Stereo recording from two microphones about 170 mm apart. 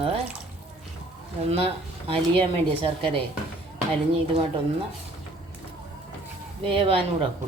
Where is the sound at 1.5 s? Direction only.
35° right (ahead or behind).